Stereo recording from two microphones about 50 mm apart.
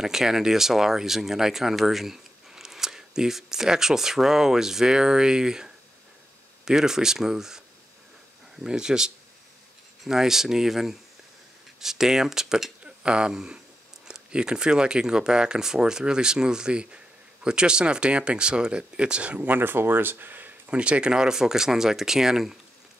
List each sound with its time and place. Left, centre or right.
0.0 s speech: centre
8.6 s speech: centre
12.8 s speech: centre
19.4 s speech: right
20.6 s speech: right; by 22.6 s centre